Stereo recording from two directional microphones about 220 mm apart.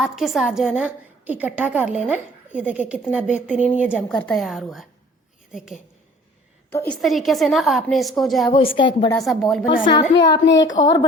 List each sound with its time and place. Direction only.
0.0 s a woman's voice: centre (ahead or behind)
6.7 s a woman's voice: 10° left (ahead or behind)
7.0 s a woman's voice: centre (ahead or behind)
8.5 s a woman's voice: 25° left (ahead or behind)
9.2 s a woman's voice: centre (ahead or behind)
9.9 s a woman's voice: 20° left (ahead or behind)